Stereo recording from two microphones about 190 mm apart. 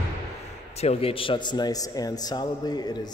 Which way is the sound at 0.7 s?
35° left (ahead or behind).